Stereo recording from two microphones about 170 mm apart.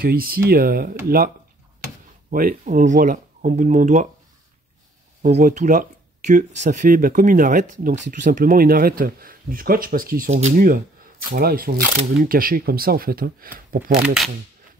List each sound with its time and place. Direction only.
0.0 s speech: 60° right (ahead or behind)
2.3 s speech: 55° right (ahead or behind)
5.2 s speech: 45° right (ahead or behind)
14.0 s speech: centre (ahead or behind)